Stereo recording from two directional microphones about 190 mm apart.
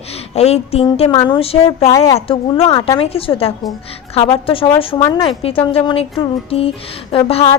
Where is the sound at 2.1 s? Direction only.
30° left (ahead or behind).